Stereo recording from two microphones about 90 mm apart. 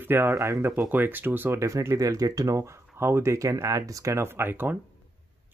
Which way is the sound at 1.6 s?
35° right (ahead or behind).